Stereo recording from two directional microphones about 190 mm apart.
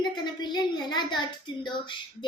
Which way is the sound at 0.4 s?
20° left (ahead or behind).